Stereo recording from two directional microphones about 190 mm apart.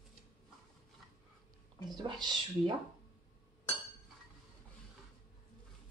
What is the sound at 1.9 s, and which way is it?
Speech, 20° right (ahead or behind).